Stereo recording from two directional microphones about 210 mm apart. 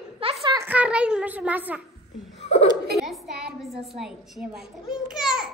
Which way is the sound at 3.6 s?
Centre (ahead or behind).